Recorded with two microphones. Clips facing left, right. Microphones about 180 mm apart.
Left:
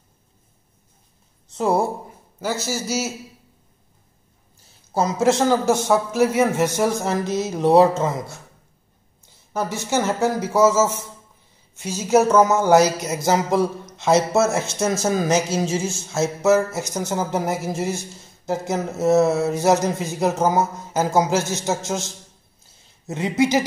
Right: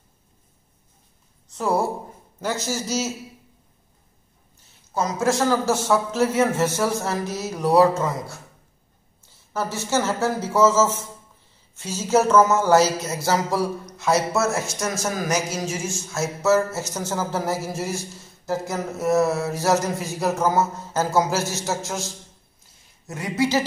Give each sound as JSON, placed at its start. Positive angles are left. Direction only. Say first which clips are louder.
{"t": 1.5, "sound": "a woman's voice", "louder": "left 3 dB", "side_deg": 25}
{"t": 2.4, "sound": "a man's voice", "louder": "left 1 dB", "side_deg": 5}
{"t": 4.9, "sound": "speech", "louder": "left 4 dB", "side_deg": 25}